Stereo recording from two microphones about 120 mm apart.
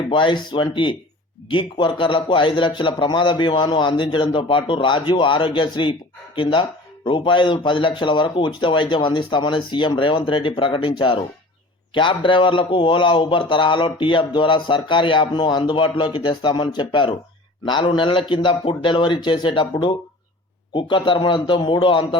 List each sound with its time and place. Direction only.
0.1 s a man's voice: 45° left (ahead or behind)